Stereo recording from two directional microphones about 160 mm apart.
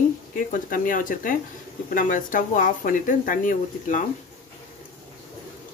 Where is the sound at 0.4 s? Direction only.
55° left (ahead or behind).